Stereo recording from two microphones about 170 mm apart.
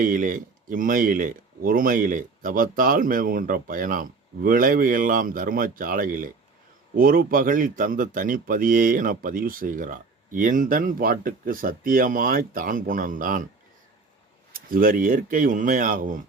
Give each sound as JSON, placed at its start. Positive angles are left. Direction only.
{"t": 0.0, "sound": "speech", "side_deg": -50}
{"t": 14.5, "sound": "speech", "side_deg": -55}